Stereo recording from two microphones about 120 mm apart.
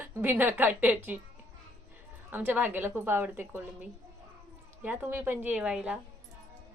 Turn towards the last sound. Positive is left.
turn(degrees=-10)  # may be behind; listen again after turning